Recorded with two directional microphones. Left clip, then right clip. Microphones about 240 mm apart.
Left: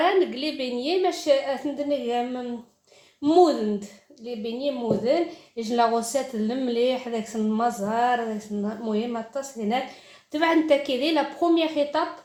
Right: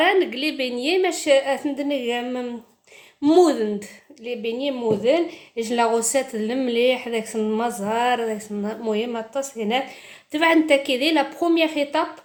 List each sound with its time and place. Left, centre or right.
0.0 s a woman's voice: right